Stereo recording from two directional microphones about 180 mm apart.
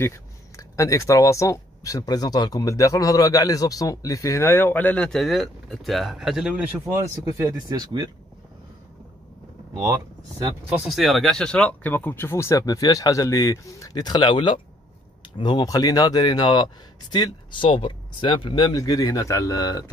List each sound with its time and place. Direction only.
0.0 s speech: 15° left (ahead or behind); by 7.0 s 5° right (ahead or behind)
7.4 s speech: 20° right (ahead or behind)
10.4 s speech: 5° right (ahead or behind); by 19.9 s 20° left (ahead or behind)